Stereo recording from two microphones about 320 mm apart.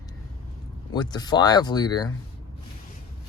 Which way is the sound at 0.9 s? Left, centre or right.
Centre.